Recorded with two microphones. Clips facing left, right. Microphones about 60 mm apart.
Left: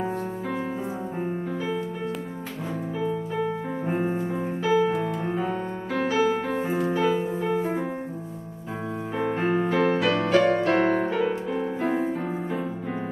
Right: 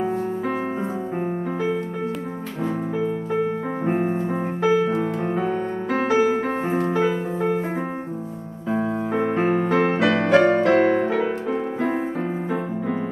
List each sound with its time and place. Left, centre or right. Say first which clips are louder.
3.8 s piano: right 4 dB; right
6.7 s music: right 3 dB; right
9.3 s music: right 2 dB; right